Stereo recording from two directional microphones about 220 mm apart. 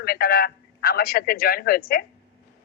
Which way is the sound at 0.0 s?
45° left (ahead or behind).